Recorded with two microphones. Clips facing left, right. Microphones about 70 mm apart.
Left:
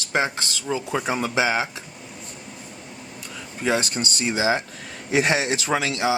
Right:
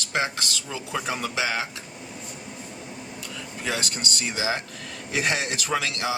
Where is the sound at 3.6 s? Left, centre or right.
Left.